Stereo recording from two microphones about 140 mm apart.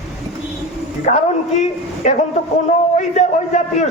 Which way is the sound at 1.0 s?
55° left (ahead or behind).